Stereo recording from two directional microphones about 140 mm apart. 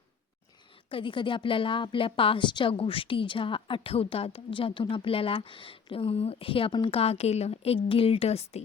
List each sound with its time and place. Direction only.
0.9 s a woman's voice: 40° left (ahead or behind)